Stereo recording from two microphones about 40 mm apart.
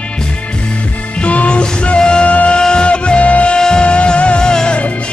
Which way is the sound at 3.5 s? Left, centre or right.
Left.